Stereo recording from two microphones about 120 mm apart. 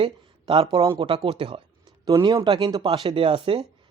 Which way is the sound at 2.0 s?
35° right (ahead or behind).